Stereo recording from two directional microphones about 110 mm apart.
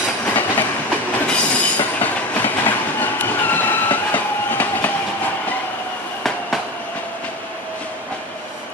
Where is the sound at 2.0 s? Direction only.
15° left (ahead or behind).